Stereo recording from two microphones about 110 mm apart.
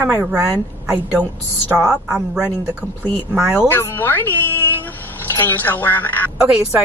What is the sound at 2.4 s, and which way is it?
A woman's voice, 15° right (ahead or behind).